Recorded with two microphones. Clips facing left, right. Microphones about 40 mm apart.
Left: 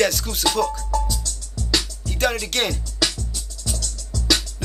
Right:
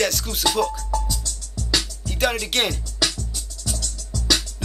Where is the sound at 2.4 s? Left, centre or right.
Centre.